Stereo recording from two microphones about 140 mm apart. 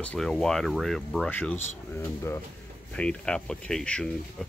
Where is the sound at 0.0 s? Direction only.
5° left (ahead or behind).